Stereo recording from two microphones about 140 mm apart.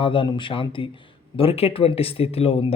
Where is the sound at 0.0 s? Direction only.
35° left (ahead or behind).